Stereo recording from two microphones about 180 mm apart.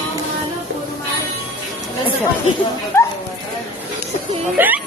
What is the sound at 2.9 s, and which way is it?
Speech, 15° left (ahead or behind).